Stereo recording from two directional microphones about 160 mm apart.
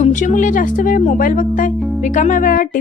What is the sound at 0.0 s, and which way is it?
Speech, 50° left (ahead or behind).